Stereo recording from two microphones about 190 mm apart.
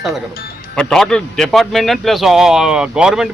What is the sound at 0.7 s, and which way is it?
A man's voice, 5° left (ahead or behind).